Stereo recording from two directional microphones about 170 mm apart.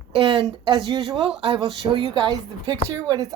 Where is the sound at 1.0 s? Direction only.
Centre (ahead or behind).